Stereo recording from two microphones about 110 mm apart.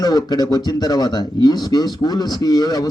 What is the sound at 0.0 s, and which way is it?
A man's voice, 35° left (ahead or behind).